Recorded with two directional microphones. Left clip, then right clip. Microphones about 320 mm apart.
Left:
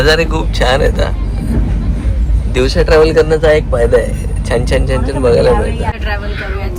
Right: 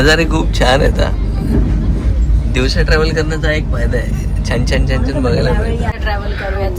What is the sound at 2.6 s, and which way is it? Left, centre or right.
Speech, centre.